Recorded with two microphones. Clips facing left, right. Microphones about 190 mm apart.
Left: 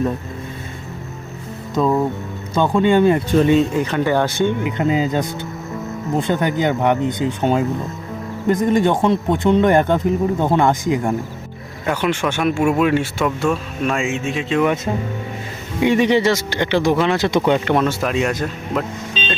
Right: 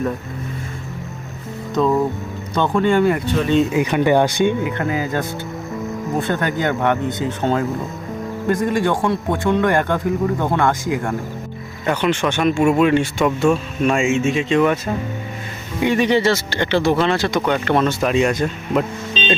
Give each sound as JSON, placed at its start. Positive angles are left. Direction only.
{"t": 1.7, "sound": "music", "side_deg": 5}
{"t": 2.6, "sound": "a man's voice", "side_deg": 20}
{"t": 3.5, "sound": "speech", "side_deg": -5}
{"t": 4.8, "sound": "a man's voice", "side_deg": 20}
{"t": 11.9, "sound": "speech", "side_deg": 5}
{"t": 14.9, "sound": "a man's voice", "side_deg": 20}
{"t": 17.7, "sound": "speech", "side_deg": 5}
{"t": 19.2, "sound": "vehicle", "side_deg": 10}